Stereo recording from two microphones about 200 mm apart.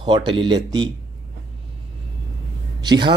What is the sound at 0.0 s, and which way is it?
Speech, 25° right (ahead or behind).